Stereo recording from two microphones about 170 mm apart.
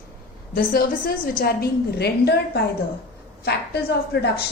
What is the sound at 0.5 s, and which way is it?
A woman's voice, 60° left (ahead or behind).